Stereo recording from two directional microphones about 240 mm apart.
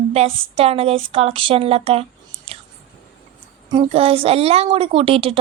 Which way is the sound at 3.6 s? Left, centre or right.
Right.